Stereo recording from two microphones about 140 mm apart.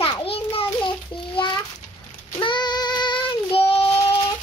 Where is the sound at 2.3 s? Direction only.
35° left (ahead or behind).